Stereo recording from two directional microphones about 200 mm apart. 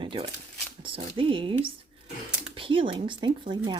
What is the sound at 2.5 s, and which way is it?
Speech, 25° right (ahead or behind).